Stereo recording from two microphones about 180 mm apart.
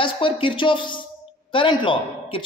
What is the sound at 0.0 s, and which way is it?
Speech, 30° left (ahead or behind).